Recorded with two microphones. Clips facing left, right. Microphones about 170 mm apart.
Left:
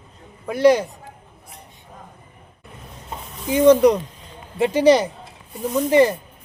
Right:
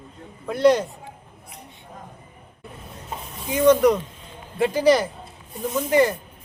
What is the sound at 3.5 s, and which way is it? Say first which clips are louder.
Speech: left 3 dB; 30° left (ahead or behind).